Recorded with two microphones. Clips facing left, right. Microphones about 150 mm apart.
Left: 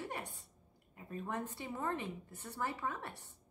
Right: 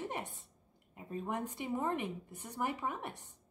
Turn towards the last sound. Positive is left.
turn(degrees=-15)  # may be behind; listen again after turning